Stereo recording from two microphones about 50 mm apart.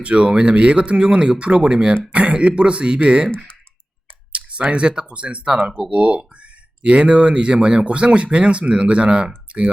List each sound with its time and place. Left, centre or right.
0.0 s speech: right
4.3 s clicking: right
4.6 s speech: right